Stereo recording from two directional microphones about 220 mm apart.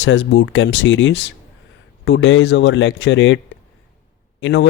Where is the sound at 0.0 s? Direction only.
55° left (ahead or behind).